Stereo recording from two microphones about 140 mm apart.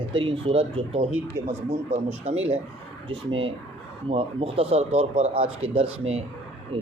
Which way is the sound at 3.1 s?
40° right (ahead or behind).